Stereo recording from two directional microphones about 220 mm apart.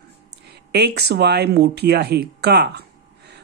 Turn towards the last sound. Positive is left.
turn(degrees=-50)  # may be behind; listen again after turning